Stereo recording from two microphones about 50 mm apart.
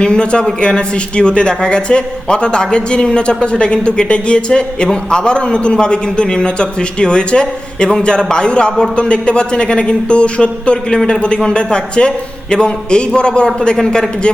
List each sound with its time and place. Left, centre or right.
0.0 s a man's voice: centre